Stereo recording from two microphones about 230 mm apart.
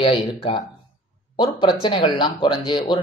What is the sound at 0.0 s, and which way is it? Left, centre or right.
A man's voice, left.